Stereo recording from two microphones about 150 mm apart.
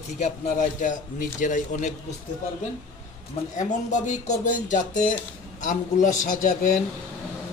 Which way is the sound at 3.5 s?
55° left (ahead or behind).